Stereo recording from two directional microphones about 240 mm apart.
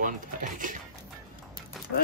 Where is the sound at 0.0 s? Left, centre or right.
Right.